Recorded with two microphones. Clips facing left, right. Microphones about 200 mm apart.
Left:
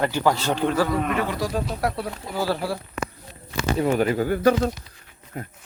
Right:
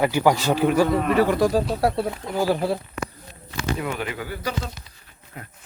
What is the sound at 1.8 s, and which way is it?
Speech, 30° right (ahead or behind).